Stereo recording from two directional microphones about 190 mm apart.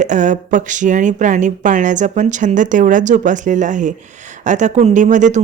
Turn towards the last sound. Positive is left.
turn(degrees=-40)  # may be behind; listen again after turning